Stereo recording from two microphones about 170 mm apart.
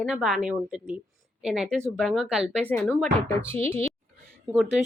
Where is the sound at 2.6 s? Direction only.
10° left (ahead or behind).